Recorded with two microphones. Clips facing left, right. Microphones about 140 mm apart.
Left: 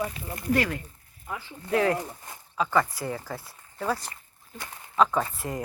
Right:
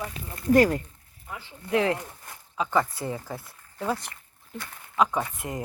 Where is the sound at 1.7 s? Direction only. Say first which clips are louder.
Even; 20° right (ahead or behind).